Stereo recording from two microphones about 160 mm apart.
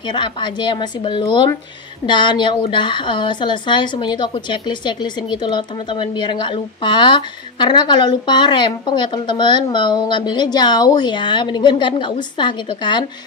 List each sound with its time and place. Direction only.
0.0 s a woman's voice: 30° left (ahead or behind)